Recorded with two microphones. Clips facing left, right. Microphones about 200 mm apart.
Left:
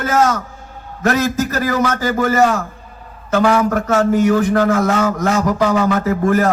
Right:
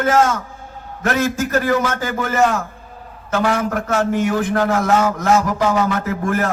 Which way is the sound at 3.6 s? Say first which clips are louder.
Left 4 dB; 40° left (ahead or behind).